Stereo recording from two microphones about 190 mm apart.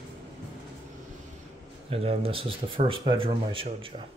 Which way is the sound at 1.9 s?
30° right (ahead or behind).